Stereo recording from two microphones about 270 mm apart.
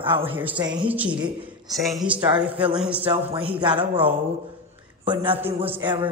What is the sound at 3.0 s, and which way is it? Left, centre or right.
A man's voice, right.